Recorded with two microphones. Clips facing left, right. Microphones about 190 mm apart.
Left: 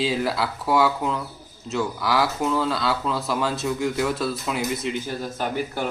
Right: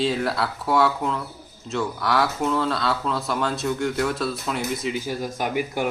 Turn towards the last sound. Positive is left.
turn(degrees=-10)  # may be behind; listen again after turning